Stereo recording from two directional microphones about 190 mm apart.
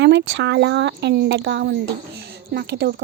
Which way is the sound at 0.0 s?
70° right (ahead or behind).